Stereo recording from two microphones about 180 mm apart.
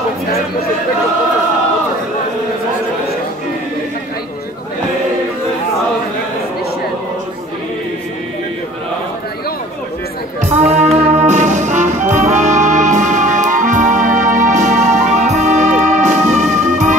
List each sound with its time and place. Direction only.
10.5 s music: 40° right (ahead or behind)